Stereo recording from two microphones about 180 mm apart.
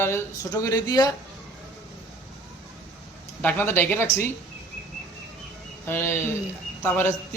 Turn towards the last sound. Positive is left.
turn(degrees=10)  # may be behind; listen again after turning